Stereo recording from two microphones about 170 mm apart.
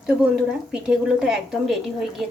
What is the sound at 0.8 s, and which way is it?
Speech, 5° right (ahead or behind).